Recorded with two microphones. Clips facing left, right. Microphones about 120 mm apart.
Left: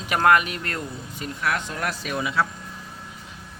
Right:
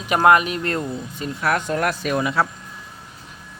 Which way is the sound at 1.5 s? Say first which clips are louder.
Right 7 dB; 50° right (ahead or behind).